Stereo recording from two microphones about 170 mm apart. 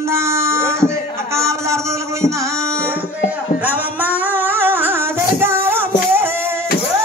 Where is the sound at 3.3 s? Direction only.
10° right (ahead or behind).